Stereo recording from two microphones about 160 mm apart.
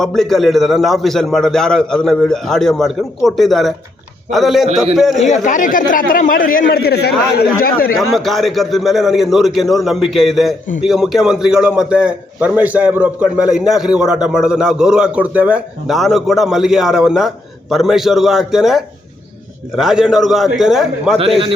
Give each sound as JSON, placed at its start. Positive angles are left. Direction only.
{"t": 0.0, "sound": "a man's voice", "side_deg": 5}
{"t": 5.3, "sound": "speech", "side_deg": 50}
{"t": 7.9, "sound": "a man's voice", "side_deg": 0}
{"t": 21.2, "sound": "a man's voice", "side_deg": -35}